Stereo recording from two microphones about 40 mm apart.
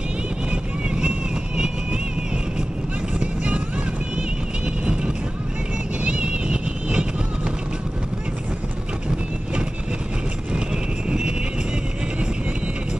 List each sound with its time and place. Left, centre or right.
0.5 s vehicle: right
3.2 s vehicle: right
5.9 s vehicle: right
11.1 s vehicle: right